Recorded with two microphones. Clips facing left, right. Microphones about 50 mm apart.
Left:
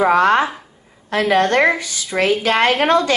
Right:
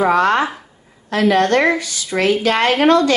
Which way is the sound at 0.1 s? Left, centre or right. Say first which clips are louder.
Left 1 dB; left.